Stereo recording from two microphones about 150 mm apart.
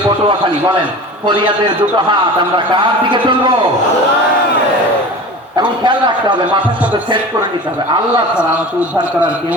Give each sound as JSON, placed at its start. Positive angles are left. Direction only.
{"t": 2.7, "sound": "speech", "side_deg": -30}
{"t": 5.5, "sound": "a man's voice", "side_deg": -30}
{"t": 8.4, "sound": "a man's voice", "side_deg": -10}